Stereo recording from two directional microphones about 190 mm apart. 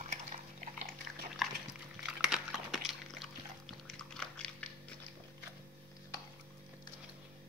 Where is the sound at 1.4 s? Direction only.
Centre (ahead or behind).